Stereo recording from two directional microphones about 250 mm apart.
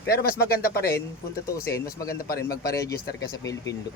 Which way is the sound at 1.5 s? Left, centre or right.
Centre.